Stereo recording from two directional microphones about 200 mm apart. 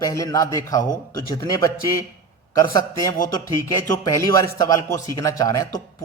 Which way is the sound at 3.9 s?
15° left (ahead or behind).